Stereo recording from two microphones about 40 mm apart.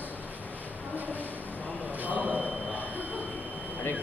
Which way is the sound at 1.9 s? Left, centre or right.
Right.